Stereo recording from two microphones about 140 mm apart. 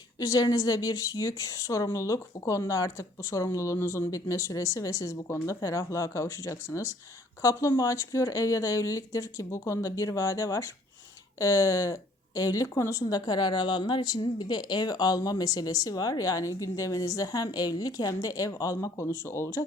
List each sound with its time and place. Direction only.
0.2 s speech: 25° left (ahead or behind)